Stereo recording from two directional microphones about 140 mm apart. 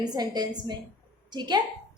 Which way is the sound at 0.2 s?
30° right (ahead or behind).